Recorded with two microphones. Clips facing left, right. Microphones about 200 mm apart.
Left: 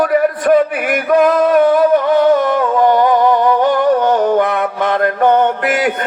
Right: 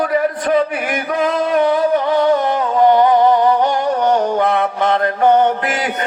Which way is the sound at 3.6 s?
55° left (ahead or behind).